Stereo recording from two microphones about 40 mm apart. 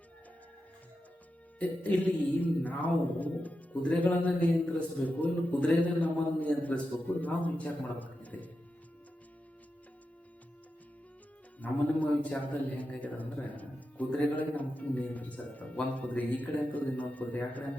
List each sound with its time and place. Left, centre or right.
1.5 s speech: left
11.6 s speech: left